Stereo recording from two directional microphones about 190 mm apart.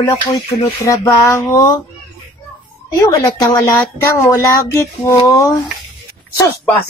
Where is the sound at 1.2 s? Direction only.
15° left (ahead or behind).